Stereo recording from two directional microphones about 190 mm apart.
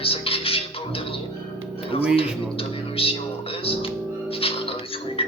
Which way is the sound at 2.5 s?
30° left (ahead or behind).